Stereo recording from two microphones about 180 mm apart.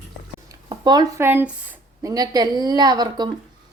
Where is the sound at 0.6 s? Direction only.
25° right (ahead or behind).